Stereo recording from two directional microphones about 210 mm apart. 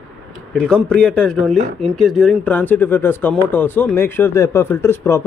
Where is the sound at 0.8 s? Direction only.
5° left (ahead or behind).